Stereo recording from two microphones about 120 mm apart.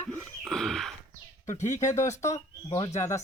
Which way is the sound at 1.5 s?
90° left.